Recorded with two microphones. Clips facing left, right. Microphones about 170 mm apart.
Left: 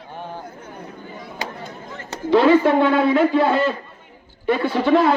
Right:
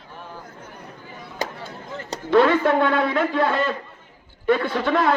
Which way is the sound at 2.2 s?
5° left (ahead or behind).